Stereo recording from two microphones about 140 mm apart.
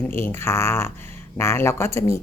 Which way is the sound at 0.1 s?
15° left (ahead or behind).